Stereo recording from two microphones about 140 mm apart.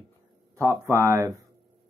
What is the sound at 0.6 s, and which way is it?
Speech, 20° right (ahead or behind).